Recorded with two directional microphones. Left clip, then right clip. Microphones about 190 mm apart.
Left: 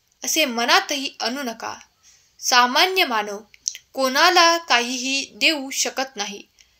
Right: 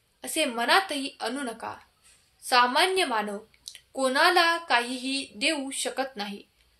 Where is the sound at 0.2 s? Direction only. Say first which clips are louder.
Left 7 dB; 35° left (ahead or behind).